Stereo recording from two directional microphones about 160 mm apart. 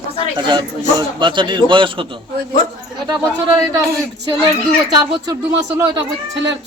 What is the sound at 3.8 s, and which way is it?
Speech, 20° right (ahead or behind).